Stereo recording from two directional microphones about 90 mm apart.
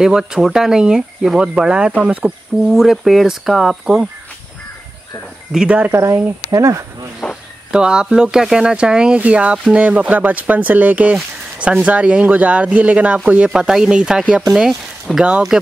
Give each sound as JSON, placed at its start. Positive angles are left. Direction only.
{"t": 0.0, "sound": "speech", "side_deg": -5}
{"t": 5.7, "sound": "speech", "side_deg": -15}
{"t": 5.9, "sound": "speech", "side_deg": -30}
{"t": 7.7, "sound": "speech", "side_deg": -10}